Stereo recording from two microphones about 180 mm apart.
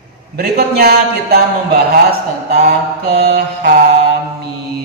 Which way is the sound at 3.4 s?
45° right (ahead or behind).